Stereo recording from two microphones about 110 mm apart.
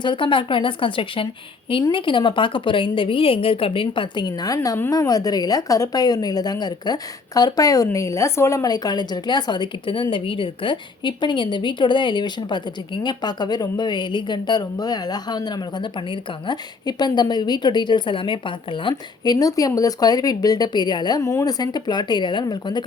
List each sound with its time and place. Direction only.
0.0 s a woman's voice: 50° left (ahead or behind)
21.2 s a woman's voice: 30° left (ahead or behind)